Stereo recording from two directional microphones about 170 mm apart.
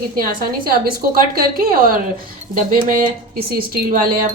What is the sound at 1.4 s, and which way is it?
Speech, 60° right (ahead or behind).